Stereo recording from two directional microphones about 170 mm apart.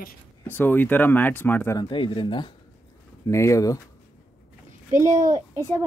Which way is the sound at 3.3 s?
15° left (ahead or behind).